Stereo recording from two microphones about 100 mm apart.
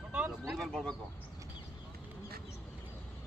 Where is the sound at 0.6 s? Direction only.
5° left (ahead or behind).